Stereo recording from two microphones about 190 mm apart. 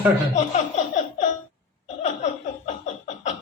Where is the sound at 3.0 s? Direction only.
35° left (ahead or behind).